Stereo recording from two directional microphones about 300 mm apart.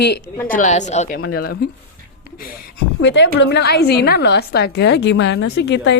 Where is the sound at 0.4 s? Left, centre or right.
Left.